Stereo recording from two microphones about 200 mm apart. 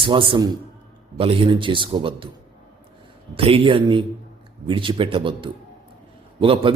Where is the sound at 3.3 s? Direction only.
30° right (ahead or behind).